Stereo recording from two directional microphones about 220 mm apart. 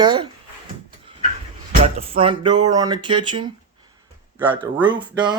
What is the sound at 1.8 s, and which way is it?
Speech, 25° right (ahead or behind).